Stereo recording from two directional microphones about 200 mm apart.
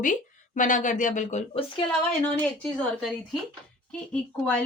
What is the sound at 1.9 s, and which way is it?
A woman's voice, 5° left (ahead or behind).